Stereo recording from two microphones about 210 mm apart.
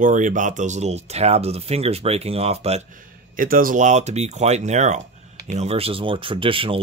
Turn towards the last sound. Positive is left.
turn(degrees=-25)  # may be behind; listen again after turning